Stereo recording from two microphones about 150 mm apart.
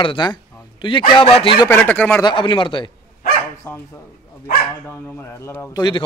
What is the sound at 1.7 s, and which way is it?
Speech, 10° left (ahead or behind).